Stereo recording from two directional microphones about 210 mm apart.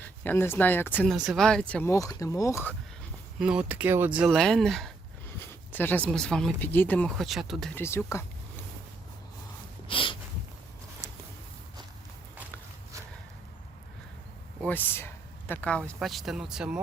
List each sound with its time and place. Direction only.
0.0 s speech: 10° left (ahead or behind)
3.3 s speech: 5° right (ahead or behind)
7.8 s speech: 10° left (ahead or behind)
9.8 s a sound: 25° left (ahead or behind)
14.6 s speech: 10° left (ahead or behind)